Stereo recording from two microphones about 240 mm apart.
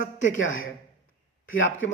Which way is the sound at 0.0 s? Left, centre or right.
Left.